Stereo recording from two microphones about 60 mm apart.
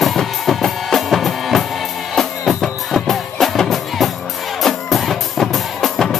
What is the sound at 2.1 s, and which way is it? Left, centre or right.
Music, centre.